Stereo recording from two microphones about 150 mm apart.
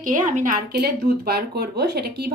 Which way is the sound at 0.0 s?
60° right (ahead or behind).